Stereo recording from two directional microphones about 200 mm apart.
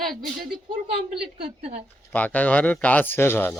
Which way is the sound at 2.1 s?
10° left (ahead or behind).